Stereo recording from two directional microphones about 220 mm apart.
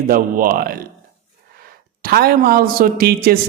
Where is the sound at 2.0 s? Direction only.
45° right (ahead or behind).